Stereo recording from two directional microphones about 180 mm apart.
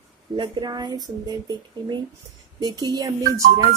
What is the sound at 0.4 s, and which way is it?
A woman's voice, 25° right (ahead or behind).